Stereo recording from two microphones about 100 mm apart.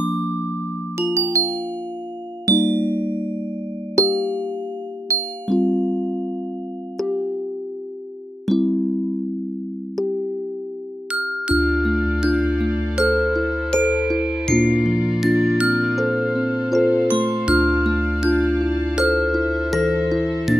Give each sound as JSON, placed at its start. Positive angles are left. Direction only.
{"t": 0.2, "sound": "music", "side_deg": 20}
{"t": 1.3, "sound": "music", "side_deg": -30}
{"t": 2.4, "sound": "music", "side_deg": -50}
{"t": 4.1, "sound": "ding", "side_deg": 15}
{"t": 5.1, "sound": "music", "side_deg": -30}
{"t": 5.5, "sound": "music", "side_deg": 5}
{"t": 8.5, "sound": "music", "side_deg": 0}
{"t": 14.4, "sound": "music", "side_deg": 5}
{"t": 16.8, "sound": "music", "side_deg": -15}